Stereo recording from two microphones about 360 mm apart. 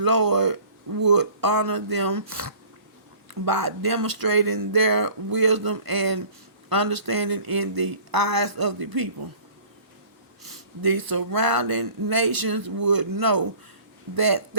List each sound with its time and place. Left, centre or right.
0.0 s speech: right
10.4 s speech: right